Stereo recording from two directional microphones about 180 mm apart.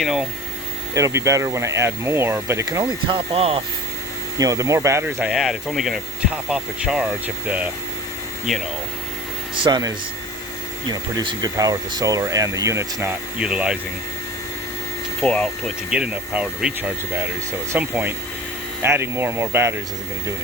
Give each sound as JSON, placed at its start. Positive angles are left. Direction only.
{"t": 0.0, "sound": "speech", "side_deg": 0}
{"t": 0.9, "sound": "speech", "side_deg": -15}
{"t": 4.4, "sound": "speech", "side_deg": -20}
{"t": 8.5, "sound": "speech", "side_deg": 0}
{"t": 9.6, "sound": "speech", "side_deg": -25}
{"t": 15.2, "sound": "speech", "side_deg": 5}
{"t": 15.9, "sound": "speech", "side_deg": -5}